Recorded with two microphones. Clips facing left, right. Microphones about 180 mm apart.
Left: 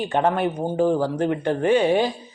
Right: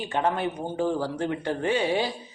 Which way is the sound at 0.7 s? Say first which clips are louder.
Left 7 dB; 45° left (ahead or behind).